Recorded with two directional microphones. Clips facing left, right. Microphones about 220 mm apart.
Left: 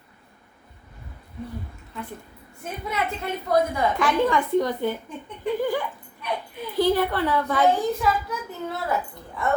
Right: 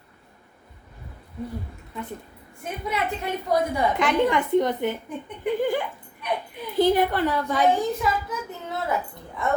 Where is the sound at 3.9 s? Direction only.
20° right (ahead or behind).